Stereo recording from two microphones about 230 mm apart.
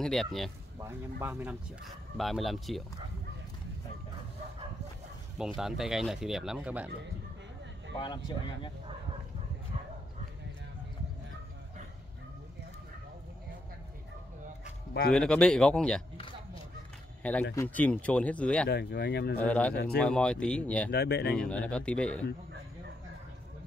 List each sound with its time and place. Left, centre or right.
0.0 s speech: centre
0.7 s speech: centre
5.6 s speech: centre
15.0 s speech: centre
17.2 s speech: centre
18.7 s speech: left
19.3 s speech: centre
19.7 s speech: left
20.0 s speech: centre
20.9 s speech: left
21.4 s speech: centre